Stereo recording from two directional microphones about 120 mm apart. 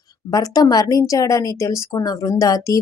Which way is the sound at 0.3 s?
30° left (ahead or behind).